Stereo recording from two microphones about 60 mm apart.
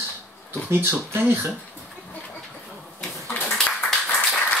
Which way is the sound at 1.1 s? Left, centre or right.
Right.